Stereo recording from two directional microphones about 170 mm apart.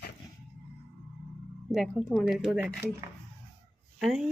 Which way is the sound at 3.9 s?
Centre (ahead or behind).